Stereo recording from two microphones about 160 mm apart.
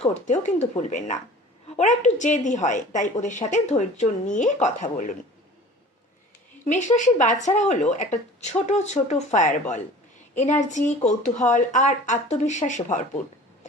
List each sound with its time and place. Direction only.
0.1 s a woman's voice: 45° left (ahead or behind)
6.7 s a woman's voice: 50° left (ahead or behind)